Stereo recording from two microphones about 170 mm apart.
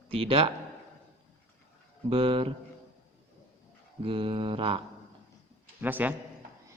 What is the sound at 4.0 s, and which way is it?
Mantra, 30° right (ahead or behind).